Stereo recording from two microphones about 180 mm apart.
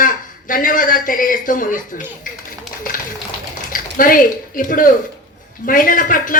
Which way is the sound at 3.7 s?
50° left (ahead or behind).